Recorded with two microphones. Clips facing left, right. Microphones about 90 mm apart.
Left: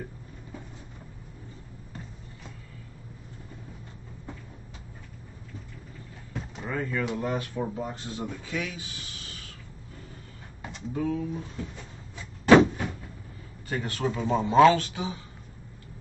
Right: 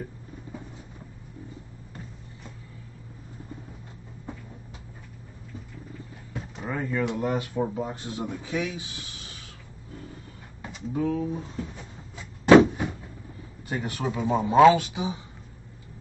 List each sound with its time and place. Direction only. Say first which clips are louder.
6.3 s a sound: right 1 dB; 5° right (ahead or behind)
6.7 s speech: right 2 dB; 15° right (ahead or behind)
10.9 s speech: right 2 dB; 15° right (ahead or behind)
12.4 s vehicle: right 2 dB; 10° right (ahead or behind)
13.7 s speech: even; 15° right (ahead or behind)